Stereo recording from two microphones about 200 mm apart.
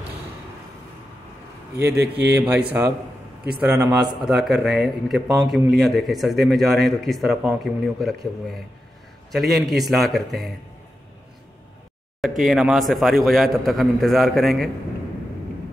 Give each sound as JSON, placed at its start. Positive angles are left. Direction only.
{"t": 1.8, "sound": "speech", "side_deg": -55}
{"t": 2.8, "sound": "a man's voice", "side_deg": -15}
{"t": 4.2, "sound": "a man's voice", "side_deg": 0}
{"t": 12.2, "sound": "a man's voice", "side_deg": 0}